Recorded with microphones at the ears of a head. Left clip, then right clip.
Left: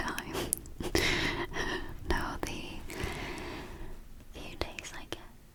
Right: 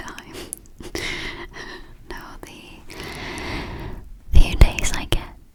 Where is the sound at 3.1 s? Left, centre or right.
Right.